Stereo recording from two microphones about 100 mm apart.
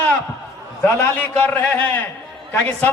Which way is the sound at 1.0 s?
15° left (ahead or behind).